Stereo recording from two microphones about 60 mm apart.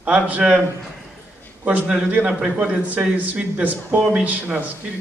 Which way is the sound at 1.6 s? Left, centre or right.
Right.